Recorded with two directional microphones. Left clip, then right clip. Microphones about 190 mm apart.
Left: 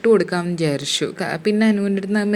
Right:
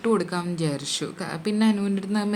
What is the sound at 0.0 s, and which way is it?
A woman's voice, 15° left (ahead or behind).